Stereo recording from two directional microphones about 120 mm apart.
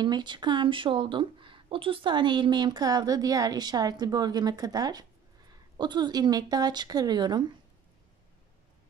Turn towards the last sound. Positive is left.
turn(degrees=-35)  # may be behind; listen again after turning